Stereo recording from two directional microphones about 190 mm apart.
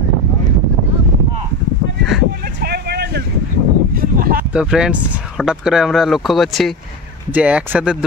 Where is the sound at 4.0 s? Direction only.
50° right (ahead or behind).